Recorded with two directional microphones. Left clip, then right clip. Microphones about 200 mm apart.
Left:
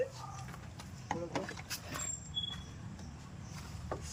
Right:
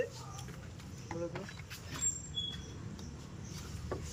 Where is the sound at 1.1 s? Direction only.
40° left (ahead or behind).